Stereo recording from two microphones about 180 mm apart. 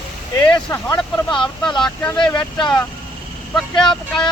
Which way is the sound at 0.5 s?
20° left (ahead or behind).